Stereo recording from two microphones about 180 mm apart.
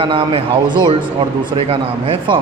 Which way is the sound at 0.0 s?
25° right (ahead or behind).